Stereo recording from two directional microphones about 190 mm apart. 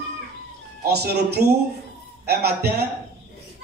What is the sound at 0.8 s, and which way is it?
A man's voice, 60° right (ahead or behind).